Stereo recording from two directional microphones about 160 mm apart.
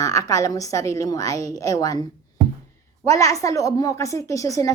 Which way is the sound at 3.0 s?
20° left (ahead or behind).